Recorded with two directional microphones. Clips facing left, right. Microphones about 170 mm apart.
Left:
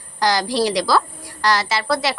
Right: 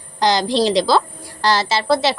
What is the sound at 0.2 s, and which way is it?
A woman's voice, 20° right (ahead or behind).